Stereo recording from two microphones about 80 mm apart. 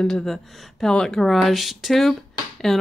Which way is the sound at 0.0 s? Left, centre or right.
Centre.